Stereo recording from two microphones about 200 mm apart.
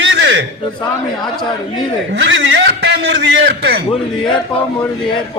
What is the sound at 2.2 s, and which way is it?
A man's voice, 65° right (ahead or behind).